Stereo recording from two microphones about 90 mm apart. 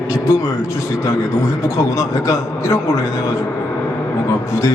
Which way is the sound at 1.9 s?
35° left (ahead or behind).